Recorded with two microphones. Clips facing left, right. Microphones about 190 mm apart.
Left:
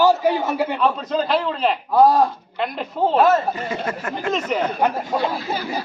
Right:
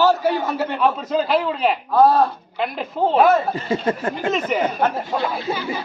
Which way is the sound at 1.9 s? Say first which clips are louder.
Even; 15° left (ahead or behind).